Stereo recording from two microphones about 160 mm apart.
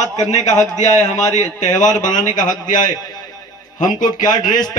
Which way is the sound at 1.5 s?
50° left (ahead or behind).